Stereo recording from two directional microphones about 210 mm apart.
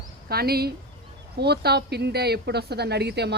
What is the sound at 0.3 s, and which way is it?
Speech, 45° right (ahead or behind).